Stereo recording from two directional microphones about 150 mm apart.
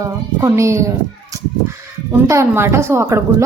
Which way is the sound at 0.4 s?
20° right (ahead or behind).